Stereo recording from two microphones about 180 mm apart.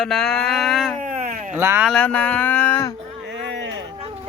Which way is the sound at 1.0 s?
40° right (ahead or behind).